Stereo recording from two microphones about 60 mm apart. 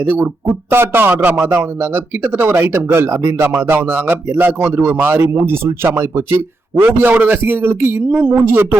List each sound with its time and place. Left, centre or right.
0.0 s speech: right
6.8 s speech: right